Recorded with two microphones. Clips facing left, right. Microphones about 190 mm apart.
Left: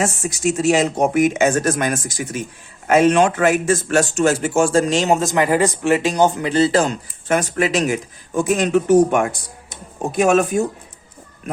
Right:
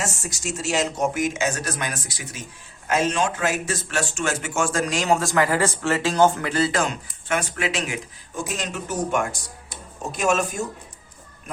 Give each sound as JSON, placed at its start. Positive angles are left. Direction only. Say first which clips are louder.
{"t": 0.0, "sound": "speech", "louder": "left 10 dB", "side_deg": 60}
{"t": 2.8, "sound": "a man's voice", "louder": "left 9 dB", "side_deg": 60}
{"t": 8.4, "sound": "speech", "louder": "left 13 dB", "side_deg": 55}